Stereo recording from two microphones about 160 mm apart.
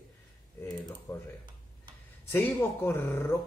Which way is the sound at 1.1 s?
20° left (ahead or behind).